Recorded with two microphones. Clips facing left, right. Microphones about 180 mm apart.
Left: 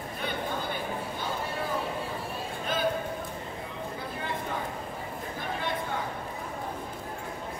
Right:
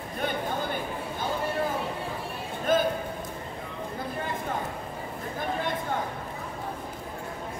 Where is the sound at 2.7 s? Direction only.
50° right (ahead or behind).